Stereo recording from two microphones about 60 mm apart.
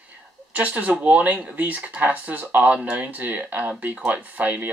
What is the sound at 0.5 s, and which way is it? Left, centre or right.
Speech, right.